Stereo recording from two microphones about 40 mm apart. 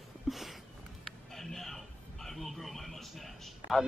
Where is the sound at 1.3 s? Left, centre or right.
Centre.